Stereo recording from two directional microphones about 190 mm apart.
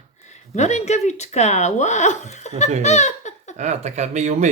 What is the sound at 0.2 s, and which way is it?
Speech, 40° left (ahead or behind).